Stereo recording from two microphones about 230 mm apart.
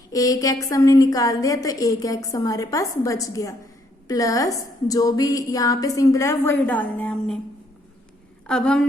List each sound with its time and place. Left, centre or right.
0.1 s a woman's voice: centre
8.4 s a woman's voice: centre